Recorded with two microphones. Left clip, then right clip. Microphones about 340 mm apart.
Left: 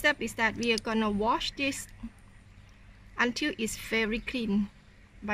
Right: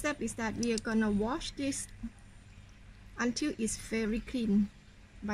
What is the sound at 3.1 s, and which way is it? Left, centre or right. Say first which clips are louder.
Speech: left 5 dB; left.